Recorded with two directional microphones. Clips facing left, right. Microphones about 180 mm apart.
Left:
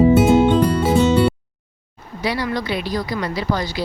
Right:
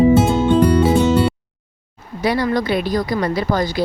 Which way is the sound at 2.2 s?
50° right (ahead or behind).